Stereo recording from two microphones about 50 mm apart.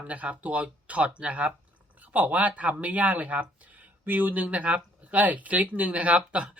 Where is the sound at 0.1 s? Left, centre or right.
Right.